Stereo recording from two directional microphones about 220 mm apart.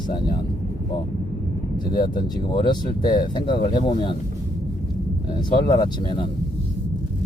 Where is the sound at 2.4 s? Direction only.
20° left (ahead or behind).